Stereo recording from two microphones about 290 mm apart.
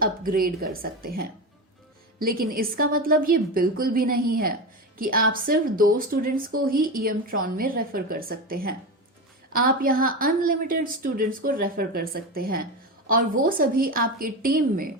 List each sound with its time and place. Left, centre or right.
0.0 s a woman's voice: right